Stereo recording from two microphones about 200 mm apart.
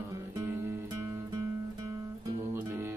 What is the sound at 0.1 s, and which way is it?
Music, 15° right (ahead or behind).